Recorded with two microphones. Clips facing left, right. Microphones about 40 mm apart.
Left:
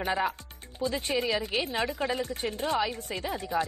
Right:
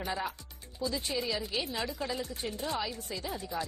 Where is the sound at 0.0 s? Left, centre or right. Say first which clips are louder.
Left 7 dB; left.